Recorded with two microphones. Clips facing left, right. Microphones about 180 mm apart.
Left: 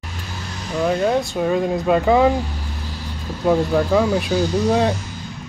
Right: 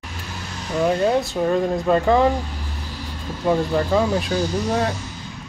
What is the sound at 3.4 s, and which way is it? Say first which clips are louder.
Speech: left 3 dB; 5° left (ahead or behind).